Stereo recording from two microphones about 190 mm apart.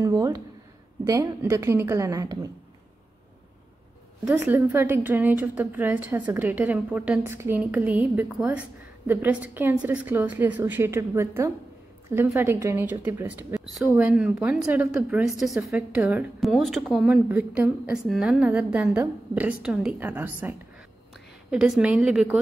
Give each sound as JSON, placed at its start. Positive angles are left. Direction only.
{"t": 0.0, "sound": "a woman's voice", "side_deg": -20}
{"t": 4.2, "sound": "a woman's voice", "side_deg": -10}